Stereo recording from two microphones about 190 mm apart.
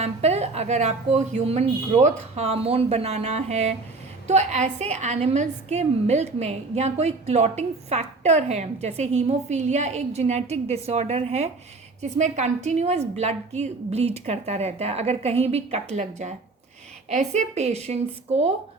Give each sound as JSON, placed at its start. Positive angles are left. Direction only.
{"t": 0.0, "sound": "a woman's voice", "side_deg": -35}